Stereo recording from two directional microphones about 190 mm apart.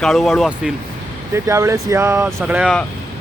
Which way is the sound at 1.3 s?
15° right (ahead or behind).